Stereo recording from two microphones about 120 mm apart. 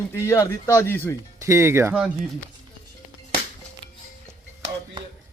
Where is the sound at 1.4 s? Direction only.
25° right (ahead or behind).